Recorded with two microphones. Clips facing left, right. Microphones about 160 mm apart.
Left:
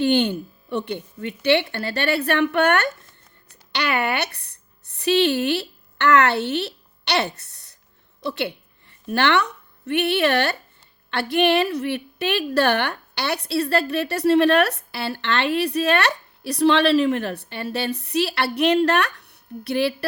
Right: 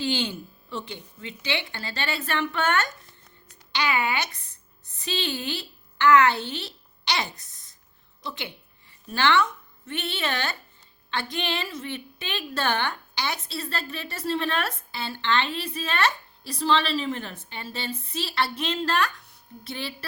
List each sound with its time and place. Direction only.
0.0 s a woman's voice: 60° left (ahead or behind)